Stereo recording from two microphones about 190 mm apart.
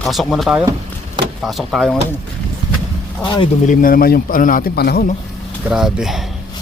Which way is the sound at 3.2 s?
20° left (ahead or behind).